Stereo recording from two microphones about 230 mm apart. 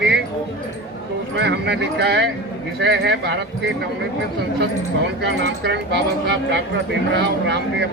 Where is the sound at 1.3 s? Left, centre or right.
Right.